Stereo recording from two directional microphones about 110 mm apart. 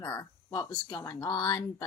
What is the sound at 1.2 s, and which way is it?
Speech, 35° left (ahead or behind).